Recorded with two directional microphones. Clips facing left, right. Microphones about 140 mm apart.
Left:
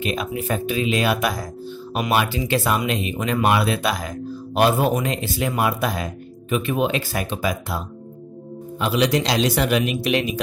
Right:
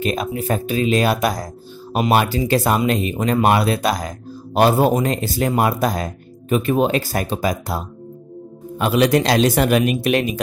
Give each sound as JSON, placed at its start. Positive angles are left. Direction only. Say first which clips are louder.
{"t": 0.0, "sound": "a man's voice", "louder": "right 3 dB", "side_deg": -40}
{"t": 8.7, "sound": "a man's voice", "louder": "right 4 dB", "side_deg": -50}